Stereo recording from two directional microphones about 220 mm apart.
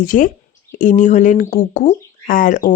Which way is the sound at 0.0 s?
40° left (ahead or behind).